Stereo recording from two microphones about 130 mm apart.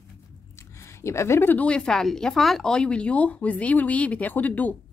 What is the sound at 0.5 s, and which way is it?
Speech, 20° left (ahead or behind).